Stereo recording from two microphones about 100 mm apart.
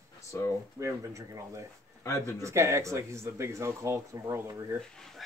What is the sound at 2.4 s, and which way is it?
Speech, 30° right (ahead or behind).